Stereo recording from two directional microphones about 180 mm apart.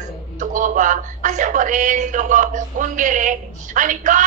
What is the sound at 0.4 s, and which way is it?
A woman's voice, 45° right (ahead or behind).